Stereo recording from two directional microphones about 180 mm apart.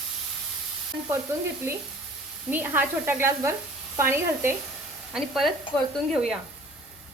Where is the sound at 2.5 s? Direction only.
10° right (ahead or behind).